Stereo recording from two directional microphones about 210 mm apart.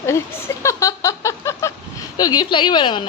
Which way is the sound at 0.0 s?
15° left (ahead or behind).